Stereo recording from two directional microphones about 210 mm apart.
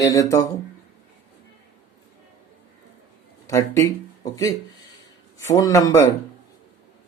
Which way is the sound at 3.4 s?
15° left (ahead or behind).